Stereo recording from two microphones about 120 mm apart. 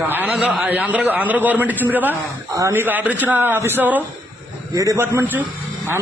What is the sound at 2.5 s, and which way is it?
A man's voice, 25° right (ahead or behind).